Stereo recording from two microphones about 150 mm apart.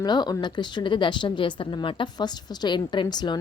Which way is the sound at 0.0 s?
30° left (ahead or behind).